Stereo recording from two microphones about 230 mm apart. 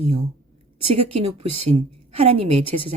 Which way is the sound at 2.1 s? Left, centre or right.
Right.